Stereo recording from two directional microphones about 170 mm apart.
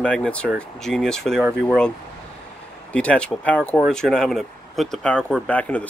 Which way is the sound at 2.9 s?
5° left (ahead or behind).